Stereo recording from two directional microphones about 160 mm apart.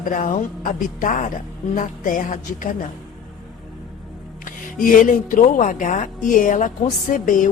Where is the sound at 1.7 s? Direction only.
55° left (ahead or behind).